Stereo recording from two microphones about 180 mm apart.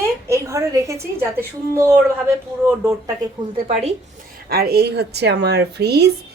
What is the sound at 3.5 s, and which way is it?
Speech, 35° right (ahead or behind).